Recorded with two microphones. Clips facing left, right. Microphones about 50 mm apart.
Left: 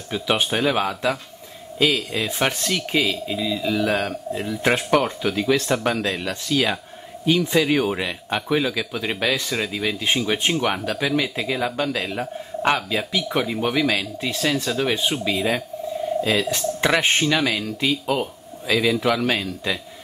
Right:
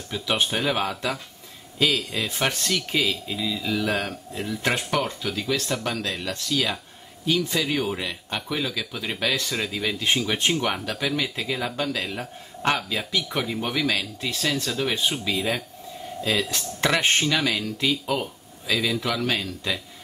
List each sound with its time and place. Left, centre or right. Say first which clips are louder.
0.3 s speech: left 3 dB; centre
4.9 s speech: left 6 dB; left
19.4 s speech: left 3 dB; centre